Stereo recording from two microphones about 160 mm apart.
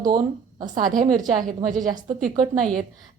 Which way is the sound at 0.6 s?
55° right (ahead or behind).